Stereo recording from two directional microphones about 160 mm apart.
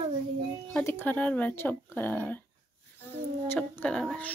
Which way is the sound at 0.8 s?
15° left (ahead or behind).